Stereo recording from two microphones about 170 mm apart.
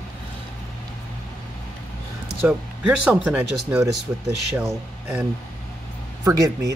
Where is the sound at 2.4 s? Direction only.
5° right (ahead or behind).